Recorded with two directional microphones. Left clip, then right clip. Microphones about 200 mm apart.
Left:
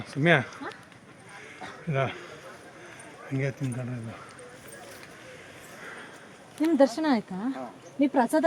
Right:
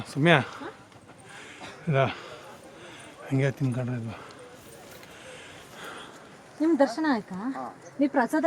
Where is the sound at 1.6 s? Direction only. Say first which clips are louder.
Right 4 dB; 35° right (ahead or behind).